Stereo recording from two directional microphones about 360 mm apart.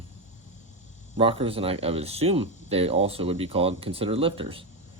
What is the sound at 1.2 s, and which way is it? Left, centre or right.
Speech, centre.